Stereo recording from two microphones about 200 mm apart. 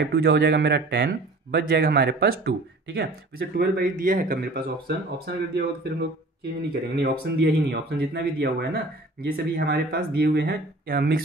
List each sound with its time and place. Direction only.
0.0 s speech: 55° right (ahead or behind)